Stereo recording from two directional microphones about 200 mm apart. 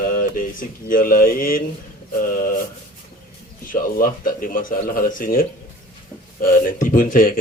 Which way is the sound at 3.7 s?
45° left (ahead or behind).